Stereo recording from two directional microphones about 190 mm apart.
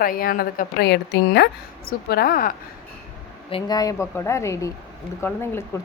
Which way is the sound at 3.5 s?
20° left (ahead or behind).